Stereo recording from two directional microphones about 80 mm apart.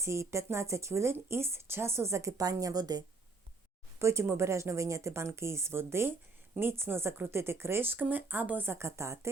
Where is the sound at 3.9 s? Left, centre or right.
Right.